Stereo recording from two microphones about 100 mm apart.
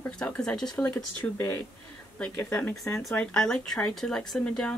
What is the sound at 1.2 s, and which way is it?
Speech, 20° left (ahead or behind).